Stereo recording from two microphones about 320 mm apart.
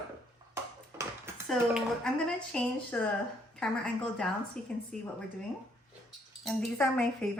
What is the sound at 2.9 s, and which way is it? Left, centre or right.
Speech, centre.